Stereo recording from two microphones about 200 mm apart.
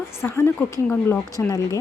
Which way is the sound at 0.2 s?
10° left (ahead or behind).